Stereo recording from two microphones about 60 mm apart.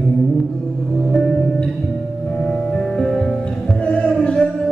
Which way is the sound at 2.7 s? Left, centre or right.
Centre.